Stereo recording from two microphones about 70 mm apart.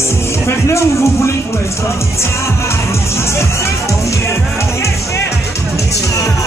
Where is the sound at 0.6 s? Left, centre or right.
Left.